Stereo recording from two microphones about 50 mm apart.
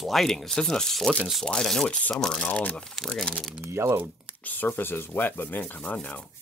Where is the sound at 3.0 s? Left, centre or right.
Centre.